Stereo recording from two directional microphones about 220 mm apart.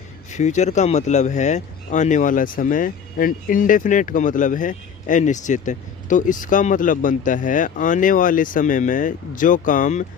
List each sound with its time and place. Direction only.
0.3 s speech: 30° left (ahead or behind)